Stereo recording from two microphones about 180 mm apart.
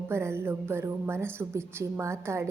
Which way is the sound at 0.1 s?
15° right (ahead or behind).